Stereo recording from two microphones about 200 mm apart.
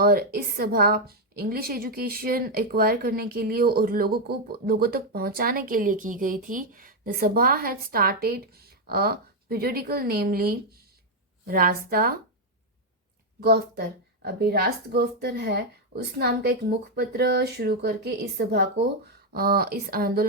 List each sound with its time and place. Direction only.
0.0 s a woman's voice: 50° right (ahead or behind)
13.4 s a woman's voice: 50° right (ahead or behind)